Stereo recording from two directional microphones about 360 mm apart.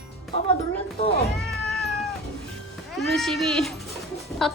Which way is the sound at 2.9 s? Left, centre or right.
Centre.